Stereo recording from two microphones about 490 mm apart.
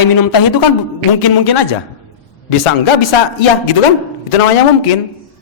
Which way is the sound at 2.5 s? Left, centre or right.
Left.